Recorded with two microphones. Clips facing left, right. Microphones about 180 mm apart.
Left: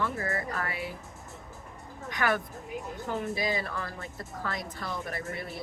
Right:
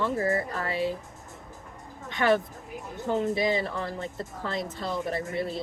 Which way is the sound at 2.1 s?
25° right (ahead or behind).